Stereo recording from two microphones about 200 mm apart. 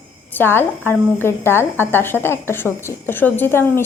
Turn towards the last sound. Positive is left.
turn(degrees=10)  # may be behind; listen again after turning